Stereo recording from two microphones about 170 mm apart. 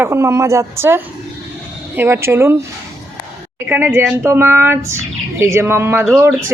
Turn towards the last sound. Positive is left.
turn(degrees=-15)  # may be behind; listen again after turning